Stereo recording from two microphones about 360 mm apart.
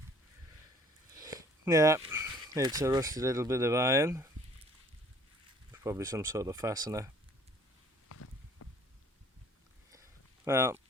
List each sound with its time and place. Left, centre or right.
1.1 s speech: centre
5.7 s speech: centre
8.1 s a sound: left
10.4 s speech: centre